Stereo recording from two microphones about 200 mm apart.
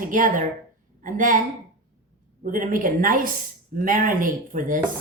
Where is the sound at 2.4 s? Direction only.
40° right (ahead or behind).